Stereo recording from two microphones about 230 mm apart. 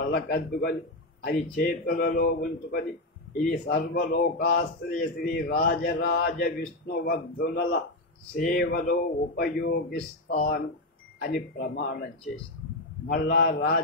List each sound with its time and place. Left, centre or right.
0.1 s a man's voice: left
13.0 s a man's voice: left